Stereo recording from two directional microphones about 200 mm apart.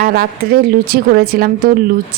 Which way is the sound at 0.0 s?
50° right (ahead or behind).